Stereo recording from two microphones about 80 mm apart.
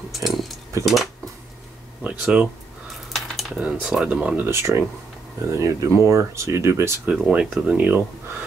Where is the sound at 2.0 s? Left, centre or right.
Centre.